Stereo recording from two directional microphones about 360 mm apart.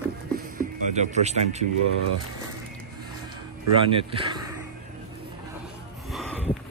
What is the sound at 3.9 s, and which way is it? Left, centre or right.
Speech, centre.